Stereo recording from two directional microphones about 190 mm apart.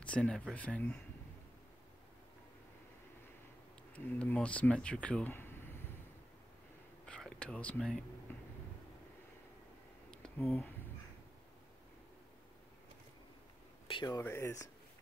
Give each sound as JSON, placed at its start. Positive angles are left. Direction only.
{"t": 0.0, "sound": "speech", "side_deg": 5}
{"t": 3.9, "sound": "speech", "side_deg": 5}
{"t": 7.1, "sound": "whispering", "side_deg": 5}
{"t": 8.3, "sound": "a sound", "side_deg": 10}
{"t": 10.1, "sound": "a sound", "side_deg": 5}
{"t": 13.8, "sound": "speech", "side_deg": 25}